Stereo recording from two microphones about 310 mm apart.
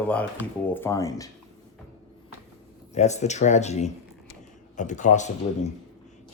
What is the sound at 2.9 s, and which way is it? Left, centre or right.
Speech, left.